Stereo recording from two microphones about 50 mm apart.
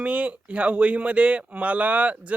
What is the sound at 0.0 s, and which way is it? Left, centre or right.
Speech, right.